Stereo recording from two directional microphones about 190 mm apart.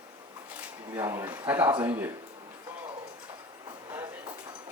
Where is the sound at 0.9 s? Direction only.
15° right (ahead or behind).